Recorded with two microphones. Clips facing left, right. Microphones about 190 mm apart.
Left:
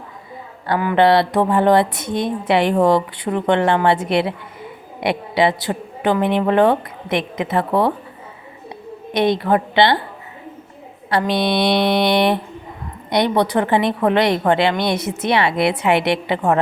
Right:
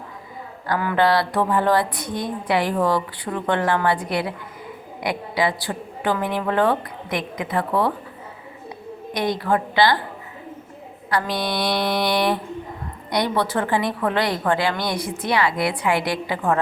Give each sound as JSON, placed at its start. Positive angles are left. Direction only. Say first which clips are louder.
{"t": 0.7, "sound": "a woman's voice", "louder": "left 5 dB", "side_deg": 20}
{"t": 9.1, "sound": "a woman's voice", "louder": "left 5 dB", "side_deg": 25}
{"t": 11.1, "sound": "a woman's voice", "louder": "left 6 dB", "side_deg": 25}